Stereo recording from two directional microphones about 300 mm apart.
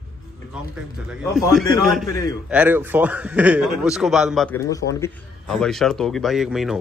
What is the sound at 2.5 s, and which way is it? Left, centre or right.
Speech, centre.